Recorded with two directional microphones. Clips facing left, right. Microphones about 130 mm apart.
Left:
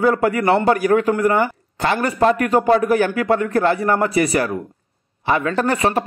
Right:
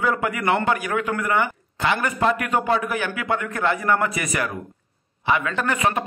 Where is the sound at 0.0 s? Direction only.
40° left (ahead or behind).